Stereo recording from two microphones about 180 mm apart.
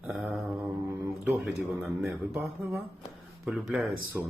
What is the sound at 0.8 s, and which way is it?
Speech, 10° right (ahead or behind).